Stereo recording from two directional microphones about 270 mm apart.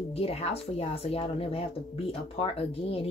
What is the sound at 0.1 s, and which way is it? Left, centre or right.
Speech, left.